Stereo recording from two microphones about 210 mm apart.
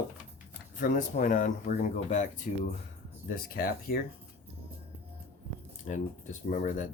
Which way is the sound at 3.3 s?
45° left (ahead or behind).